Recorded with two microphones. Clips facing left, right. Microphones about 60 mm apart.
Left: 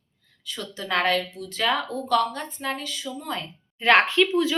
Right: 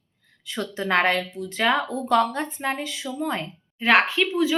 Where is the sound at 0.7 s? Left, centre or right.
Right.